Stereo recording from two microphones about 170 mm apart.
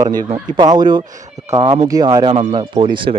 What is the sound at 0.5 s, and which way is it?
Speech, 25° right (ahead or behind).